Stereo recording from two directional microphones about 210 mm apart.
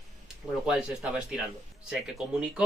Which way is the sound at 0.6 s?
5° right (ahead or behind).